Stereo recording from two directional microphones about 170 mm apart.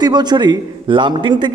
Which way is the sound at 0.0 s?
25° right (ahead or behind).